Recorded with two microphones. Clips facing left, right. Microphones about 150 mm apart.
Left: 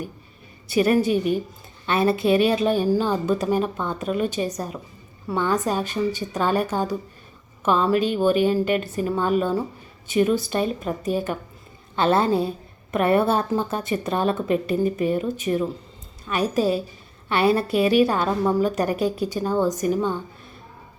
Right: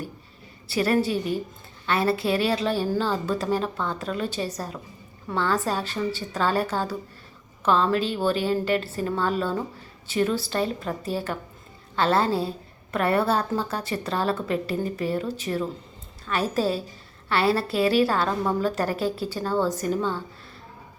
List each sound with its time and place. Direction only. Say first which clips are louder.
0.7 s a woman's voice: left 4 dB; 20° left (ahead or behind)